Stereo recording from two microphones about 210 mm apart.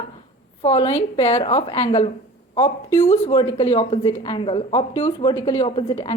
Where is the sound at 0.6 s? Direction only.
25° left (ahead or behind).